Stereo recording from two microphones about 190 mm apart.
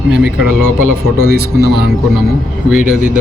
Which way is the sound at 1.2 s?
55° right (ahead or behind).